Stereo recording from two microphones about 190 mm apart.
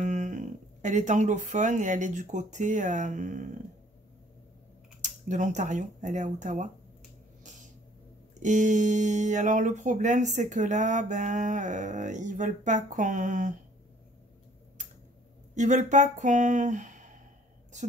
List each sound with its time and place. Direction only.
0.0 s speech: 40° right (ahead or behind)
5.0 s speech: 40° right (ahead or behind)
8.4 s speech: 40° right (ahead or behind)
15.5 s speech: 40° right (ahead or behind)